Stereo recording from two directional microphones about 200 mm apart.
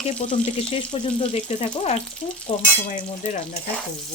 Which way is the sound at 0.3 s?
25° left (ahead or behind).